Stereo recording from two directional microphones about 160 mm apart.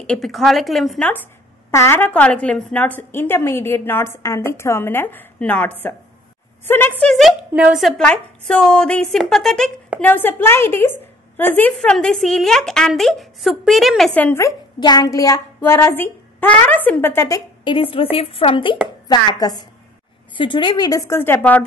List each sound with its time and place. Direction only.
0.0 s speech: 5° left (ahead or behind)
1.7 s a woman's voice: 15° left (ahead or behind)
17.6 s a woman's voice: 35° left (ahead or behind); by 21.6 s 10° left (ahead or behind)